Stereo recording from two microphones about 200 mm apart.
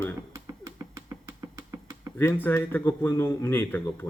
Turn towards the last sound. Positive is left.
turn(degrees=10)  # may be behind; listen again after turning